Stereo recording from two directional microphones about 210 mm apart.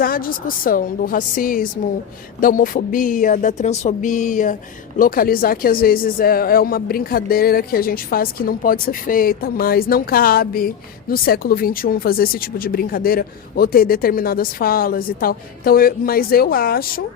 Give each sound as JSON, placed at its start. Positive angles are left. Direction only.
{"t": 0.0, "sound": "speech", "side_deg": 45}
{"t": 2.4, "sound": "music", "side_deg": 40}
{"t": 4.9, "sound": "speech", "side_deg": 40}